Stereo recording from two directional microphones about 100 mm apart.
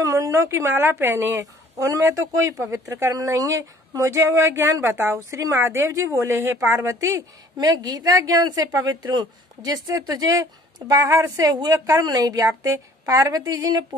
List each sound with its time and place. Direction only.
0.0 s a woman's voice: 35° right (ahead or behind)